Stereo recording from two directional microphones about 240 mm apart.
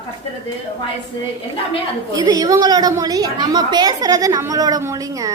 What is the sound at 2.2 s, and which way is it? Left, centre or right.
A woman's voice, centre.